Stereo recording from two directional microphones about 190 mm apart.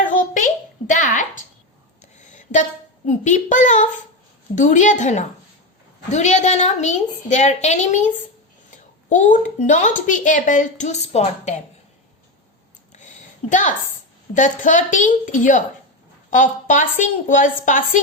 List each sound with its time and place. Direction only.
0.0 s a sound: 40° left (ahead or behind)
3.1 s speech: 40° left (ahead or behind)
13.5 s a woman's voice: 40° left (ahead or behind)